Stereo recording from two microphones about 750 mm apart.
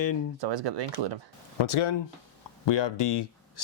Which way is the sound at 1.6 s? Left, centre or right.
Left.